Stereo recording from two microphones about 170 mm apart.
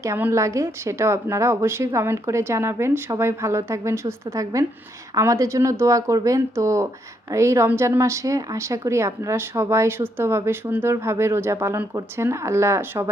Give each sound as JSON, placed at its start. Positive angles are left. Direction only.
{"t": 0.0, "sound": "a woman's voice", "side_deg": -15}